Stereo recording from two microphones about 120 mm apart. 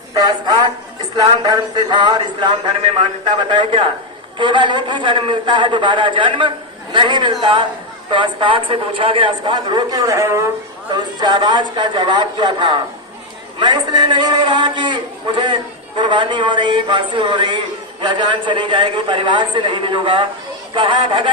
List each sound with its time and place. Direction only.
0.1 s a man's voice: 35° right (ahead or behind)
10.1 s speech: 25° right (ahead or behind)
10.9 s a man's voice: 40° right (ahead or behind)